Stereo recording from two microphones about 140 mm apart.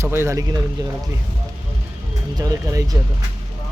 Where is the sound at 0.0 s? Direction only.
20° right (ahead or behind).